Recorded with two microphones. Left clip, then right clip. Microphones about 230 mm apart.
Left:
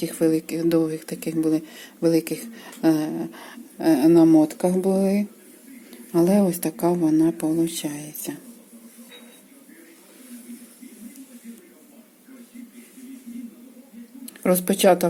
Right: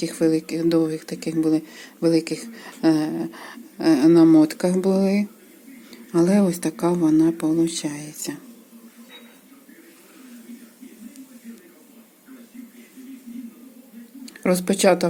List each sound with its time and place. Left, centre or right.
0.0 s speech: centre
14.3 s speech: centre